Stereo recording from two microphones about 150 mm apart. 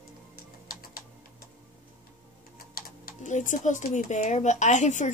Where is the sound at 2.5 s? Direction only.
80° left.